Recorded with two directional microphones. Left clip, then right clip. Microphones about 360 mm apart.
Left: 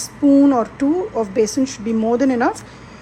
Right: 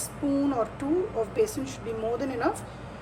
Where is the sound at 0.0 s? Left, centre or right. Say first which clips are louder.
Left 14 dB; left.